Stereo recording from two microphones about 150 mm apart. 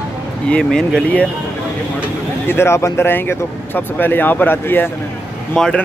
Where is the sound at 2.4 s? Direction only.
15° left (ahead or behind).